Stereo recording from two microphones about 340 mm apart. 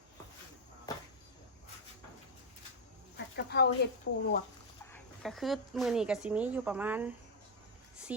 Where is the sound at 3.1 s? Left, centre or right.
Left.